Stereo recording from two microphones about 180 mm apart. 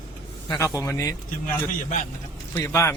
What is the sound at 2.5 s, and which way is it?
Speech, 15° left (ahead or behind).